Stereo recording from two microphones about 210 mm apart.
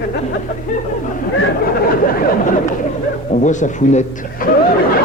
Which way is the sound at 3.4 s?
35° left (ahead or behind).